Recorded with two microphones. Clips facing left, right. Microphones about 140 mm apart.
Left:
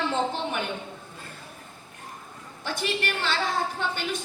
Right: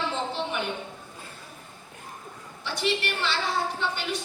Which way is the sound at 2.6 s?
50° left (ahead or behind).